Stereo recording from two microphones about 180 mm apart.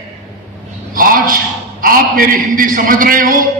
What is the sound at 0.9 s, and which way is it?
A man's voice, 50° right (ahead or behind).